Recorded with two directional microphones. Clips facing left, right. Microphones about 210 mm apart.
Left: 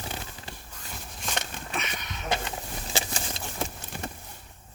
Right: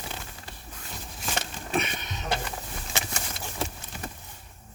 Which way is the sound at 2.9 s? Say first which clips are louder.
Left 2 dB; 30° left (ahead or behind).